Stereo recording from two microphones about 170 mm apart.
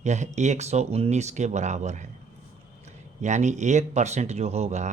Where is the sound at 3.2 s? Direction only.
45° right (ahead or behind).